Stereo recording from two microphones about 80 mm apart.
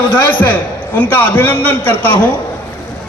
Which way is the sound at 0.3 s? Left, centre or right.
Centre.